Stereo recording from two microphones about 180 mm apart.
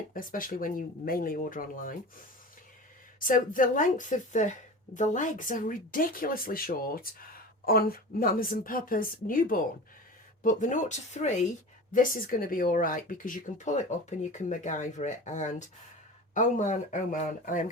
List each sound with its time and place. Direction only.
0.1 s speech: 50° left (ahead or behind)